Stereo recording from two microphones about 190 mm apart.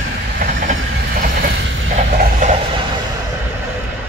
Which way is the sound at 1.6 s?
85° right.